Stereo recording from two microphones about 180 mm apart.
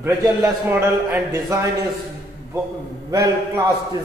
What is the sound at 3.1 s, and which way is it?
Speech, 15° right (ahead or behind).